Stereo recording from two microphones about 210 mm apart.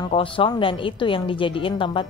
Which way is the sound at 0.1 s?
25° left (ahead or behind).